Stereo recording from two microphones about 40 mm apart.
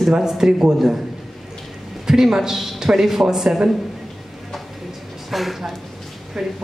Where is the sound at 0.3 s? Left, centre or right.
Centre.